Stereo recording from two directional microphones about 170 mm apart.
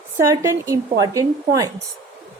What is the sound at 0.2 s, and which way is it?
A woman's voice, 15° right (ahead or behind).